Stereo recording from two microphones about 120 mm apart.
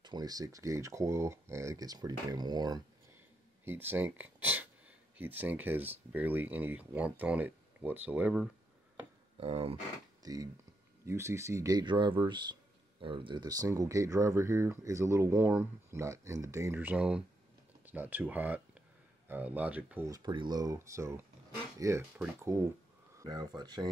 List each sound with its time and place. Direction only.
0.0 s speech: 35° right (ahead or behind)
3.6 s speech: 20° right (ahead or behind)
9.4 s speech: 55° right (ahead or behind)
10.2 s speech: 30° right (ahead or behind)
11.8 s speech: 40° right (ahead or behind); by 20.1 s 10° right (ahead or behind)
20.1 s speech: 35° right (ahead or behind)
23.2 s speech: 35° right (ahead or behind)